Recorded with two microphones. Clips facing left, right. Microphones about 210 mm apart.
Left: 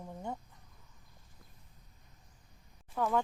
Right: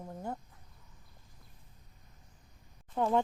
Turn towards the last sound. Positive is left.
turn(degrees=-25)  # may be behind; listen again after turning